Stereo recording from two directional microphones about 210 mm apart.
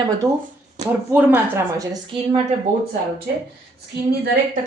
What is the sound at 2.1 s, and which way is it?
Speech, 25° right (ahead or behind).